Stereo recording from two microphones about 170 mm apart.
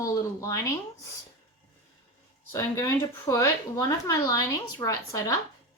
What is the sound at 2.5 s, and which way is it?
A woman's voice, 15° left (ahead or behind).